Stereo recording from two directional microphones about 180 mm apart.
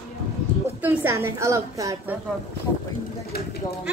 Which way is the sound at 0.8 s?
10° right (ahead or behind).